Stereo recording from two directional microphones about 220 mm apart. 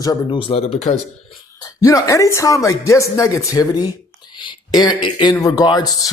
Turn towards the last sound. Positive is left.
turn(degrees=15)  # may be behind; listen again after turning